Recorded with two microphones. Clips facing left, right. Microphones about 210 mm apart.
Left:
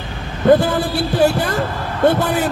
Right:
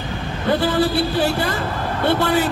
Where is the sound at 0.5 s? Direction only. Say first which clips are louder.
Left 5 dB; 50° left (ahead or behind).